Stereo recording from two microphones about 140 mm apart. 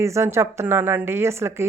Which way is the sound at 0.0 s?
20° right (ahead or behind).